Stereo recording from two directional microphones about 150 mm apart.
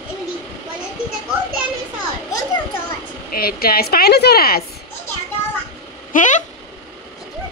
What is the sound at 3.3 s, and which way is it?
Speech, 90° left.